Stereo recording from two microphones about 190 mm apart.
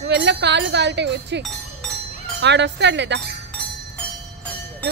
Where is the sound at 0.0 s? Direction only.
65° right (ahead or behind).